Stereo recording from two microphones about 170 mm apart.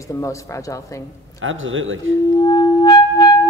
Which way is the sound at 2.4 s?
25° left (ahead or behind).